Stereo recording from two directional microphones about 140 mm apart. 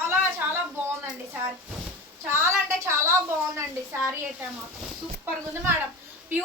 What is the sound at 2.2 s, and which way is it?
A woman's voice, 15° right (ahead or behind).